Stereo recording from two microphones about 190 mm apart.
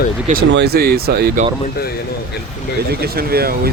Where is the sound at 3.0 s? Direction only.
55° right (ahead or behind).